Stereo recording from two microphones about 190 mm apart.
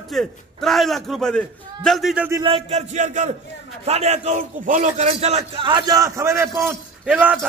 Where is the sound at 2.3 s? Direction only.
25° right (ahead or behind).